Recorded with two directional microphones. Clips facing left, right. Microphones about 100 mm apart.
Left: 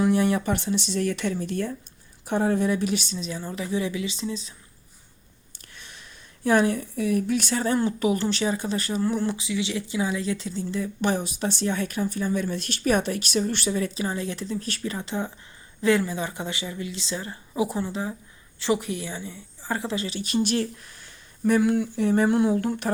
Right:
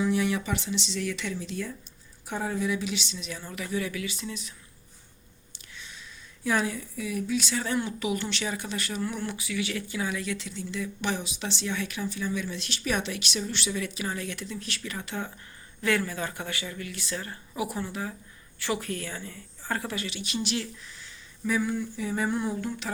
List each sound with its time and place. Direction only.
0.0 s a woman's voice: 50° left (ahead or behind)
3.2 s speech: 30° left (ahead or behind)
5.7 s speech: 55° left (ahead or behind)
13.7 s a woman's voice: 35° left (ahead or behind); by 22.9 s 65° left (ahead or behind)